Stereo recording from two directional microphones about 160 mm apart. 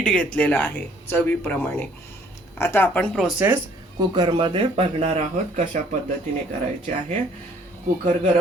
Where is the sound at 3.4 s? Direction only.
15° right (ahead or behind).